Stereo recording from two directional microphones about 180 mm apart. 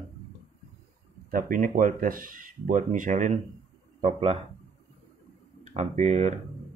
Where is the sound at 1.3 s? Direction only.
50° right (ahead or behind).